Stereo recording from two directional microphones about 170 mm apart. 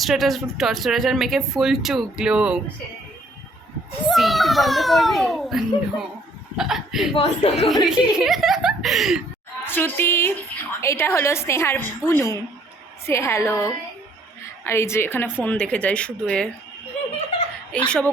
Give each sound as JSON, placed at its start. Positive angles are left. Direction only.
{"t": 0.0, "sound": "speech", "side_deg": 0}
{"t": 4.1, "sound": "speech", "side_deg": 0}
{"t": 7.1, "sound": "speech", "side_deg": 40}
{"t": 7.9, "sound": "speech", "side_deg": 0}
{"t": 9.6, "sound": "a woman's voice", "side_deg": 15}
{"t": 17.7, "sound": "speech", "side_deg": 5}